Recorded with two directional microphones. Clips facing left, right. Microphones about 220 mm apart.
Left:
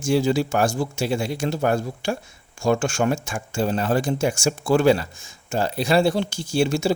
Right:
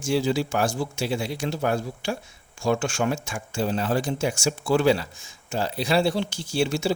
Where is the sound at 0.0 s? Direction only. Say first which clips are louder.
Left 3 dB; 45° left (ahead or behind).